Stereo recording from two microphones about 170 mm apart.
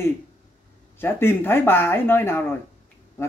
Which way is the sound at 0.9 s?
15° left (ahead or behind).